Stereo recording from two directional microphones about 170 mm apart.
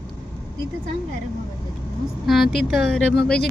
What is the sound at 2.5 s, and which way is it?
Speech, centre (ahead or behind).